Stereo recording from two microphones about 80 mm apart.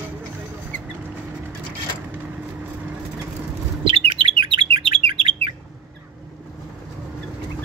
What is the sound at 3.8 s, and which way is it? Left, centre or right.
Chirp, right.